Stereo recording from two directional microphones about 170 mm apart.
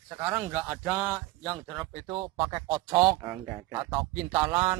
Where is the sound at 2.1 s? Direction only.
30° right (ahead or behind).